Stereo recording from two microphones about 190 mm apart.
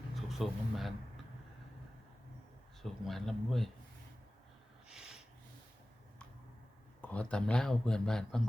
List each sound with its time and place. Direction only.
0.2 s a sound: centre (ahead or behind)
2.8 s speech: centre (ahead or behind)
4.9 s snort: 5° right (ahead or behind)
7.0 s speech: 5° left (ahead or behind)